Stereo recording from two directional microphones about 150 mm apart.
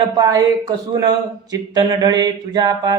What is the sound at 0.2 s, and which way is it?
Speech, 25° right (ahead or behind).